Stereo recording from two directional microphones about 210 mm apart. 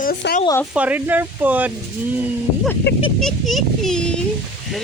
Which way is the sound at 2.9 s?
55° left (ahead or behind).